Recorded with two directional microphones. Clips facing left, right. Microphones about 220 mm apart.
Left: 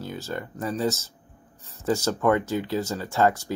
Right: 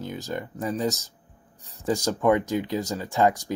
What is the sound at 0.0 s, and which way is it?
Speech, 15° right (ahead or behind).